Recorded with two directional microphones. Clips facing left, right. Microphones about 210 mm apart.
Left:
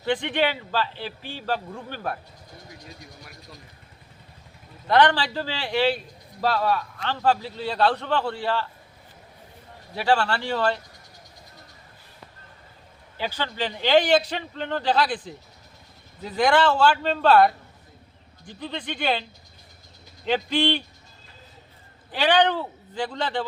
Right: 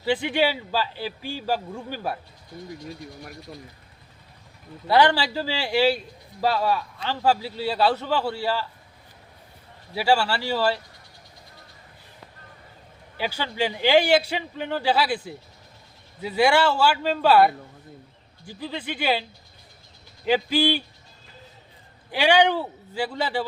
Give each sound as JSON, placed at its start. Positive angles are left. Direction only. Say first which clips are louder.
{"t": 0.0, "sound": "a man's voice", "louder": "right 1 dB", "side_deg": -5}
{"t": 4.9, "sound": "a man's voice", "louder": "even", "side_deg": -10}
{"t": 9.9, "sound": "a man's voice", "louder": "right 1 dB", "side_deg": -10}
{"t": 13.1, "sound": "a man's voice", "louder": "right 2 dB", "side_deg": -10}
{"t": 20.2, "sound": "a man's voice", "louder": "right 2 dB", "side_deg": -5}
{"t": 22.1, "sound": "a man's voice", "louder": "right 1 dB", "side_deg": -10}